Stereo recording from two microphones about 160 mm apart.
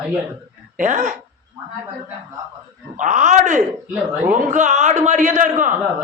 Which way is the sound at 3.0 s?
50° right (ahead or behind).